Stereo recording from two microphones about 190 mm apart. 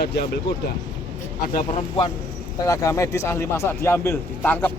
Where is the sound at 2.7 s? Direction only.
15° left (ahead or behind).